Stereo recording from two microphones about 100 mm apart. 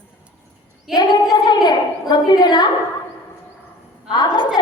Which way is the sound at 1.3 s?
45° left (ahead or behind).